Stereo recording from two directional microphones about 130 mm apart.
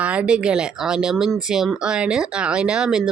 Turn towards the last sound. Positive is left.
turn(degrees=-5)  # may be behind; listen again after turning